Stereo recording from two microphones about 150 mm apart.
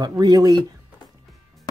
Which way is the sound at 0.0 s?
25° right (ahead or behind).